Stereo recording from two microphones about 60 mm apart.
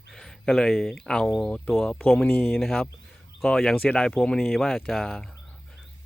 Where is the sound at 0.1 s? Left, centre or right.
Centre.